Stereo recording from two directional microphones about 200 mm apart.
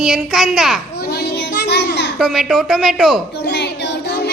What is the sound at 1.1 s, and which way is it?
Child singing, 55° left (ahead or behind).